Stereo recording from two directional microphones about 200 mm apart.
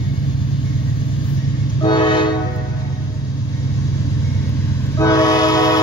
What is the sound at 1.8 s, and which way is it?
Train, 25° left (ahead or behind).